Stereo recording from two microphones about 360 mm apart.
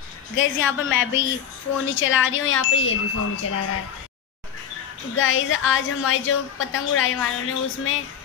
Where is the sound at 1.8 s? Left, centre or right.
Left.